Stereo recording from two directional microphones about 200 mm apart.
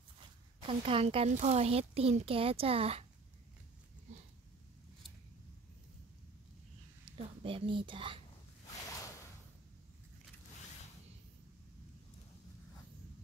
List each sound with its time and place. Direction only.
0.6 s a child's voice: 25° right (ahead or behind)
7.1 s speech: 25° right (ahead or behind)